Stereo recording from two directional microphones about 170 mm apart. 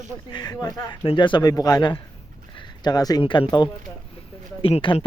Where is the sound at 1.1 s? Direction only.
30° left (ahead or behind).